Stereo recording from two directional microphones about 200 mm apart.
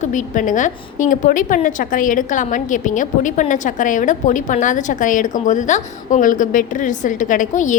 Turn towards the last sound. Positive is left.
turn(degrees=40)  # may be behind; listen again after turning